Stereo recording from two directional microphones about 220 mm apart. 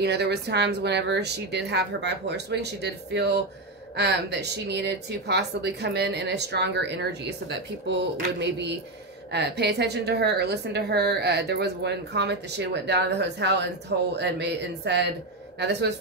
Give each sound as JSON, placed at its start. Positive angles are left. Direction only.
{"t": 0.0, "sound": "a woman's voice", "side_deg": -50}